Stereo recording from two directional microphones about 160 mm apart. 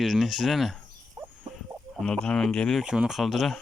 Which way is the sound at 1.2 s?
15° right (ahead or behind).